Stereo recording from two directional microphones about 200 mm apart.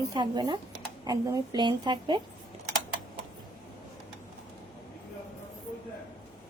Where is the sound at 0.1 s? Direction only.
20° right (ahead or behind).